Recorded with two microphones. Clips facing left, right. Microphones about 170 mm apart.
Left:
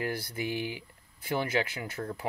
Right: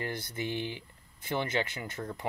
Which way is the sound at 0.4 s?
10° left (ahead or behind).